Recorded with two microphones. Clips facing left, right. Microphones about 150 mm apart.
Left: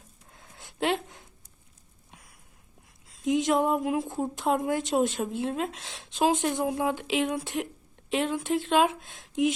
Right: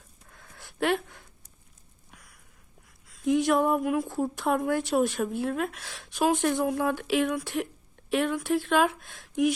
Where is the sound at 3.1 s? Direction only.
20° left (ahead or behind).